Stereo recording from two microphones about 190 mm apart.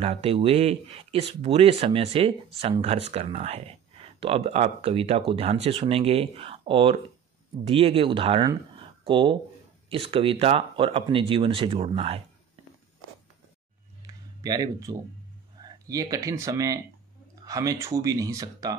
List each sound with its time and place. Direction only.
0.0 s speech: 30° right (ahead or behind)
14.0 s a sound: 20° right (ahead or behind)
15.6 s speech: 20° right (ahead or behind)